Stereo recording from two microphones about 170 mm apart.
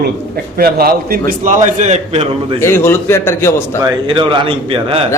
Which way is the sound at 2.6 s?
15° left (ahead or behind).